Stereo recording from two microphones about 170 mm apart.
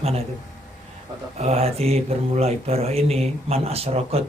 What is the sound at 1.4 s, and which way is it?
Speech, 40° right (ahead or behind).